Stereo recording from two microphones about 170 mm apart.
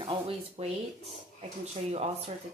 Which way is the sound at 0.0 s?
35° right (ahead or behind).